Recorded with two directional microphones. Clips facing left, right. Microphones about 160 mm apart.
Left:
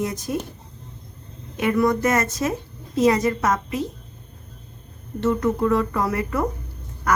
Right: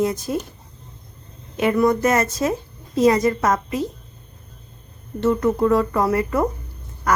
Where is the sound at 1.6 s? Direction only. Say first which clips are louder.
Right 2 dB; 25° right (ahead or behind).